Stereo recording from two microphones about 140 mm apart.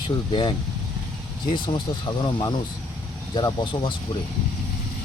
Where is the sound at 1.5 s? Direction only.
35° left (ahead or behind).